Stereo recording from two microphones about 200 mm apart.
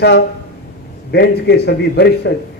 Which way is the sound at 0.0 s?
55° left (ahead or behind).